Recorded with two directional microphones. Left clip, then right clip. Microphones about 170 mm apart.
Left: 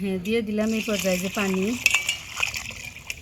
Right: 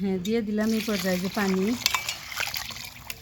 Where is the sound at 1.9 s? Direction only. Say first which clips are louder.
Left 4 dB; 15° right (ahead or behind).